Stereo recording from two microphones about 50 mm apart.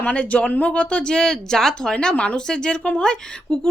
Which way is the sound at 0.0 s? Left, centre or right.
Left.